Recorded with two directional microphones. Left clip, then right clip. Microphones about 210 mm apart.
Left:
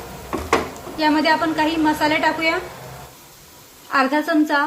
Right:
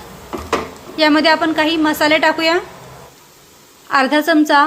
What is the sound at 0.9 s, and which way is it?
A woman's voice, 45° right (ahead or behind).